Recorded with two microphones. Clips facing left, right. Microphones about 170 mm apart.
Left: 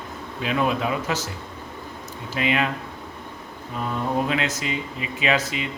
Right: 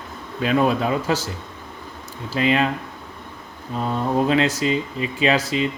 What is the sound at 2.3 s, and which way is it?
Speech, 35° right (ahead or behind).